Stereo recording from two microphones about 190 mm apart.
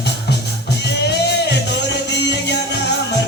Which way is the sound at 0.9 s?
60° left (ahead or behind).